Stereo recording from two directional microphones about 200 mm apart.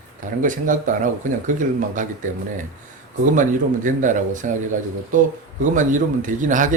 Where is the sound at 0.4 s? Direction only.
40° right (ahead or behind).